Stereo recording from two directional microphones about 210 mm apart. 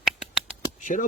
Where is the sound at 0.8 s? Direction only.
35° left (ahead or behind).